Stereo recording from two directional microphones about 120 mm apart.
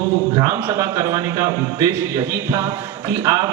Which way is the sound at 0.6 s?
30° right (ahead or behind).